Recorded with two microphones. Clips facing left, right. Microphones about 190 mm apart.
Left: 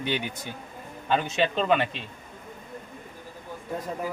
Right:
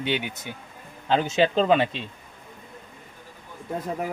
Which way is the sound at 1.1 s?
30° right (ahead or behind).